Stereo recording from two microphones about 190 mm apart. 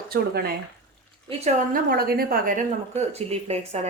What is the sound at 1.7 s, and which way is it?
Speech, 50° right (ahead or behind).